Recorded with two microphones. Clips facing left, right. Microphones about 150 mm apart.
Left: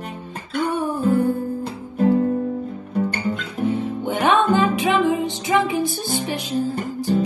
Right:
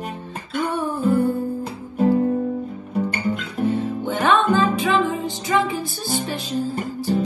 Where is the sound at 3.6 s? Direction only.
15° left (ahead or behind).